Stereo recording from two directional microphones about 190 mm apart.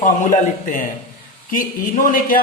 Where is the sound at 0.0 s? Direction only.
45° left (ahead or behind).